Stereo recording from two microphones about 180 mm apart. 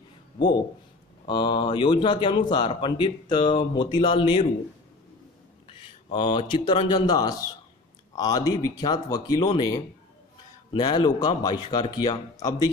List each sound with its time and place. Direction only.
1.2 s speech: 25° left (ahead or behind)
5.7 s a sound: 25° left (ahead or behind)
7.0 s speech: 20° left (ahead or behind)